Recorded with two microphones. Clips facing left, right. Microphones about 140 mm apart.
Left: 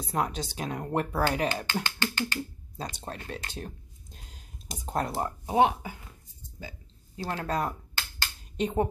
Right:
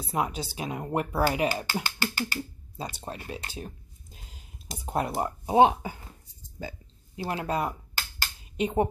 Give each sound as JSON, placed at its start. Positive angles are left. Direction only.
{"t": 0.0, "sound": "speech", "side_deg": -5}
{"t": 5.6, "sound": "speech", "side_deg": -25}
{"t": 7.2, "sound": "speech", "side_deg": -10}
{"t": 8.2, "sound": "a sound", "side_deg": -10}